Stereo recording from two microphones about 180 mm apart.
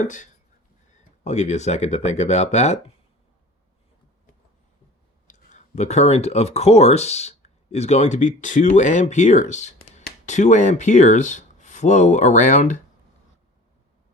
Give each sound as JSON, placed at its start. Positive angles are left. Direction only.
{"t": 0.0, "sound": "speech", "side_deg": 45}
{"t": 5.3, "sound": "speech", "side_deg": 40}